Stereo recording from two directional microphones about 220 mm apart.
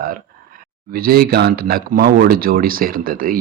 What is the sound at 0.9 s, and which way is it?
Speech, 40° right (ahead or behind).